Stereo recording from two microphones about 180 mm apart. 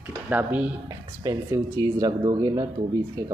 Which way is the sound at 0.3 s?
10° right (ahead or behind).